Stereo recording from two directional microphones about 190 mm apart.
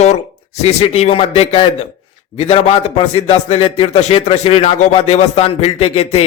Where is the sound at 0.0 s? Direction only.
35° left (ahead or behind).